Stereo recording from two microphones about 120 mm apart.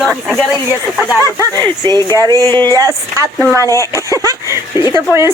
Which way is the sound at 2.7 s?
30° right (ahead or behind).